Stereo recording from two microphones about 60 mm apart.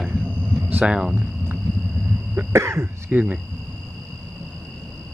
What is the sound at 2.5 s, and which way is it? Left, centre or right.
Speech, right.